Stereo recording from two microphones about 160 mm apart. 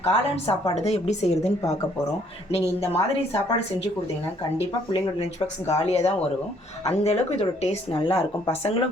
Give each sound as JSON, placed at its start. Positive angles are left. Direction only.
{"t": 0.0, "sound": "speech", "side_deg": 35}
{"t": 5.6, "sound": "speech", "side_deg": 40}